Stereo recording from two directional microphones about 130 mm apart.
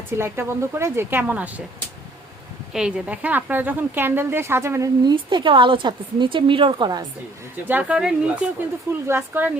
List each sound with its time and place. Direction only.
0.2 s a woman's voice: 20° right (ahead or behind)
2.7 s a woman's voice: 10° right (ahead or behind)
5.1 s a woman's voice: 40° right (ahead or behind)
7.7 s a woman's voice: 10° right (ahead or behind)